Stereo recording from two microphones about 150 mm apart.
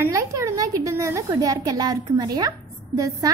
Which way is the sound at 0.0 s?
20° right (ahead or behind).